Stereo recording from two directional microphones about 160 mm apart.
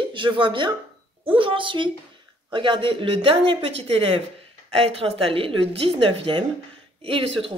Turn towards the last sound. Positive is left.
turn(degrees=-35)  # may be behind; listen again after turning